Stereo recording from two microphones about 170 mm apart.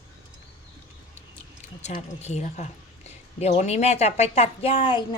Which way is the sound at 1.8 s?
40° left (ahead or behind).